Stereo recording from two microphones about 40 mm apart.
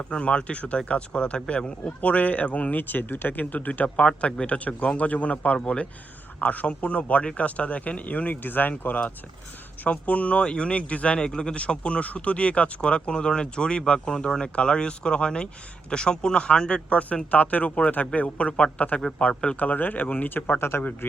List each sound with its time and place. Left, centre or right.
0.1 s speech: left
2.0 s speech: left
2.7 s speech: left
3.7 s speech: left
6.4 s speech: left
9.8 s speech: left
19.5 s speech: left
20.6 s speech: left
21.0 s a man's voice: left